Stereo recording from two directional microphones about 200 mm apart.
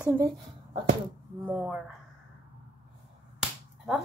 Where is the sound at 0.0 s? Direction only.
15° right (ahead or behind).